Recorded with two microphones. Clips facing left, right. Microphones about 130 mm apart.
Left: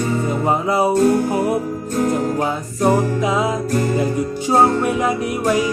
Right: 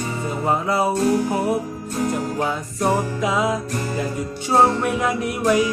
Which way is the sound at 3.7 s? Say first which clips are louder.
Left 7 dB; 45° left (ahead or behind).